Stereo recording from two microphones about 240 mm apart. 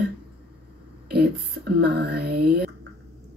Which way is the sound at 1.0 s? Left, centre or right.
Right.